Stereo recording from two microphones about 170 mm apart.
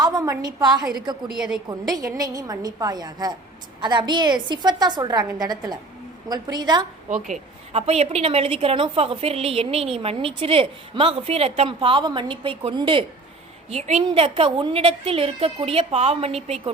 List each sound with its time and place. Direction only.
0.0 s a woman's voice: 20° right (ahead or behind)
1.3 s a woman's voice: centre (ahead or behind)
2.1 s a woman's voice: 20° right (ahead or behind)
7.1 s a woman's voice: 40° right (ahead or behind)
13.7 s a woman's voice: 40° right (ahead or behind)